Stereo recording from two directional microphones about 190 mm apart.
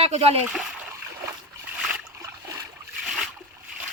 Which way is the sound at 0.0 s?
35° right (ahead or behind).